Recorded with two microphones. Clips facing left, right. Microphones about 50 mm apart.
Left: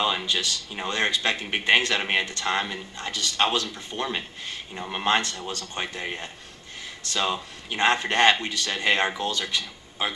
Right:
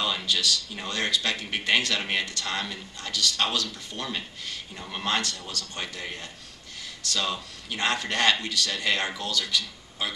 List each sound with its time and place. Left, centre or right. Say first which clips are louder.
0.0 s a man's voice: left 2 dB; left